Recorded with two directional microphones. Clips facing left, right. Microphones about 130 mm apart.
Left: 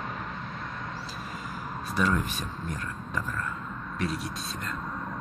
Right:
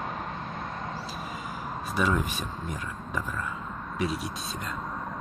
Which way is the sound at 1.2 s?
5° right (ahead or behind).